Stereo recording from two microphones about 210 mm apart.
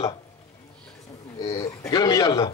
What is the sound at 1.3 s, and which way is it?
Speech, 30° left (ahead or behind).